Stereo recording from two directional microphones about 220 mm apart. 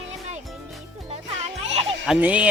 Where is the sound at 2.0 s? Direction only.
5° right (ahead or behind).